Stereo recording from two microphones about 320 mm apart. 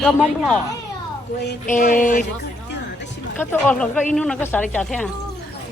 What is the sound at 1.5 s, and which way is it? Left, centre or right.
Speech, left.